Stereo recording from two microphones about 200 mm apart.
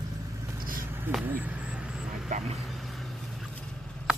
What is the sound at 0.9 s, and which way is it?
Vehicle, 5° right (ahead or behind).